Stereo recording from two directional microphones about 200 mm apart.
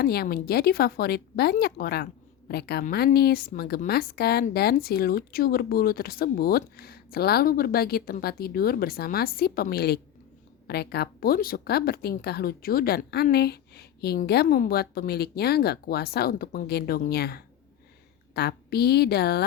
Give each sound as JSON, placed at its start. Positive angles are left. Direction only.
{"t": 0.0, "sound": "speech", "side_deg": 50}